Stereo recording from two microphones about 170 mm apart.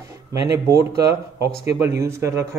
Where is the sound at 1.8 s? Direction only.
15° right (ahead or behind).